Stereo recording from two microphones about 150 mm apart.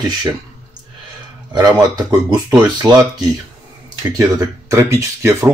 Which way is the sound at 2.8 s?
25° right (ahead or behind).